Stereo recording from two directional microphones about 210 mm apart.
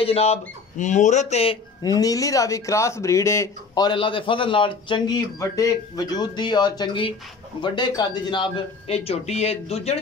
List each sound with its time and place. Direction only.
0.0 s speech: 30° left (ahead or behind)